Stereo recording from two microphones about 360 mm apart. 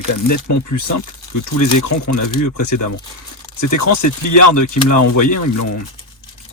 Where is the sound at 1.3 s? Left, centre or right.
Left.